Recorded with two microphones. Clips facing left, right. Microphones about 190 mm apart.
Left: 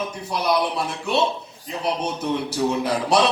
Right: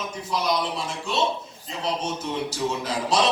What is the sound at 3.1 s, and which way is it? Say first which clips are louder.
Speech: left 4 dB; 60° left (ahead or behind).